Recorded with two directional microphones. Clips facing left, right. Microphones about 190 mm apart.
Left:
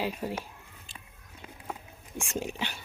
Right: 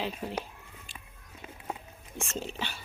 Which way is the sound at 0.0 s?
10° left (ahead or behind).